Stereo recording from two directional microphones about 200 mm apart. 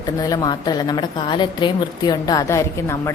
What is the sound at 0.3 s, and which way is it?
A woman's voice, 20° left (ahead or behind).